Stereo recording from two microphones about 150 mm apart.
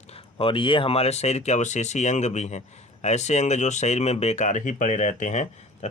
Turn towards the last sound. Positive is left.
turn(degrees=50)  # may be behind; listen again after turning